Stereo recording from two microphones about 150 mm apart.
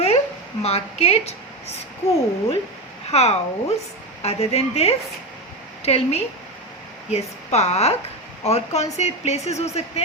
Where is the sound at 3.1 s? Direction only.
45° left (ahead or behind).